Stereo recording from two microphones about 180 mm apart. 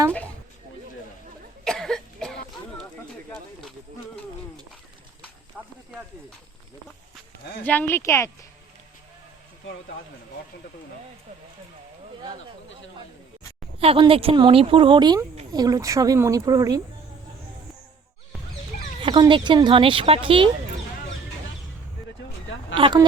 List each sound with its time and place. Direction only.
1.6 s cough: centre (ahead or behind)
5.5 s snake: centre (ahead or behind)
7.6 s speech: 10° left (ahead or behind)
13.7 s speech: 30° right (ahead or behind)
19.0 s speech: 25° right (ahead or behind)
22.7 s speech: 25° right (ahead or behind)